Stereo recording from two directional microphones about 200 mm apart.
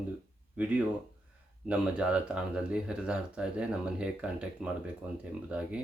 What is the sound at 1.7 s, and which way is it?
Speech, 5° right (ahead or behind).